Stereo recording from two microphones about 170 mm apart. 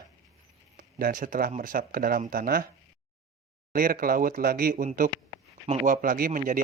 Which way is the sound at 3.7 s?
55° right (ahead or behind).